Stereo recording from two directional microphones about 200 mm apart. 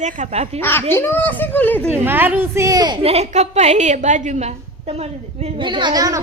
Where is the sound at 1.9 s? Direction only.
10° right (ahead or behind).